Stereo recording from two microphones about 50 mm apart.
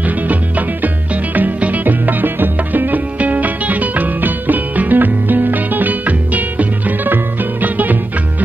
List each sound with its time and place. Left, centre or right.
0.3 s music: right